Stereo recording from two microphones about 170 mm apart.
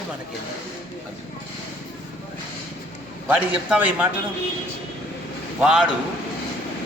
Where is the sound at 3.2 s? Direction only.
10° right (ahead or behind).